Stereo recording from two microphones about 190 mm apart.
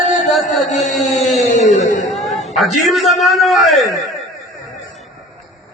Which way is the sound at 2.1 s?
Centre (ahead or behind).